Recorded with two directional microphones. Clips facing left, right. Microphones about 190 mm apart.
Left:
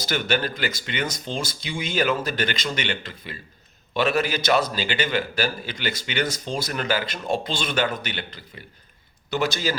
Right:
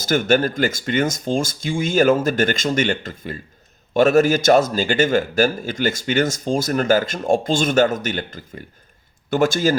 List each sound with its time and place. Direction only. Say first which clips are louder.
0.0 s a man's voice: right 7 dB; 45° right (ahead or behind)